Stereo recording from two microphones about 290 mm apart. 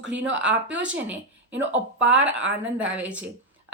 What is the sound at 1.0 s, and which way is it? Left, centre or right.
A woman's voice, centre.